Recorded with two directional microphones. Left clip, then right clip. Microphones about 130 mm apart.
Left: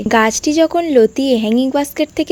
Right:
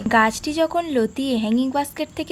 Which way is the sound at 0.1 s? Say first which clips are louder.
Left 5 dB; 40° left (ahead or behind).